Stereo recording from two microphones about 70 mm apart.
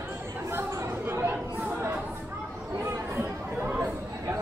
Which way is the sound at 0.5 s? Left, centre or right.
Right.